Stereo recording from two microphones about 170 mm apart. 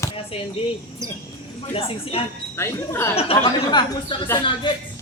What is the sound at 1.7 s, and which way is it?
Speech, 35° left (ahead or behind).